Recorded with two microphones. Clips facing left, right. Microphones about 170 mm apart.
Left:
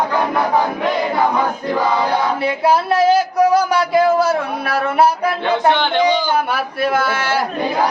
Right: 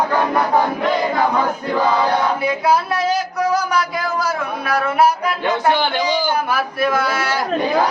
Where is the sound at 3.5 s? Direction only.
30° left (ahead or behind).